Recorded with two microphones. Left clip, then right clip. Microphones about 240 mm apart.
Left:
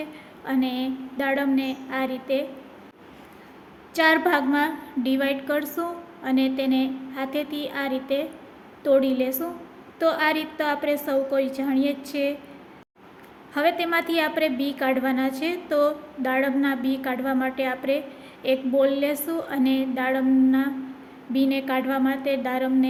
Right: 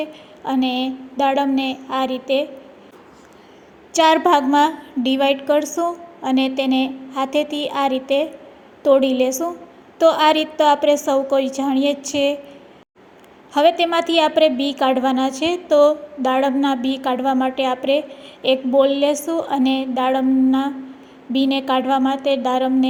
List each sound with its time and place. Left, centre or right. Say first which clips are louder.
0.4 s a woman's voice: right 6 dB; centre
3.9 s a woman's voice: right 6 dB; right
13.5 s a woman's voice: right 7 dB; right